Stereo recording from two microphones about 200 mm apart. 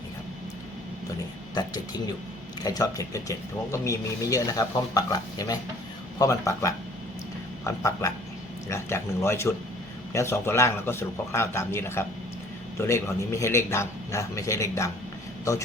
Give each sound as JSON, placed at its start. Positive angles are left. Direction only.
{"t": 1.5, "sound": "speech", "side_deg": 20}